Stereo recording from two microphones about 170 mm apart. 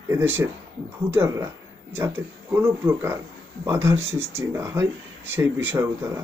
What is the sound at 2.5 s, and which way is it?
Speech, 15° right (ahead or behind).